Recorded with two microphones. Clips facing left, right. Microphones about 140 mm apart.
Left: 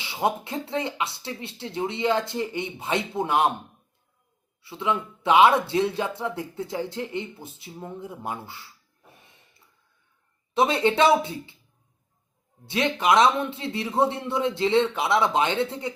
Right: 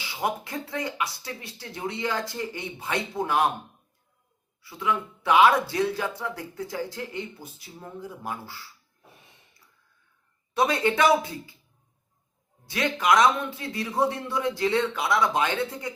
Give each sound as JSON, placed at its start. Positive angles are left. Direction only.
{"t": 0.0, "sound": "speech", "side_deg": 25}
{"t": 4.6, "sound": "speech", "side_deg": 25}
{"t": 10.5, "sound": "speech", "side_deg": 25}
{"t": 12.6, "sound": "speech", "side_deg": 25}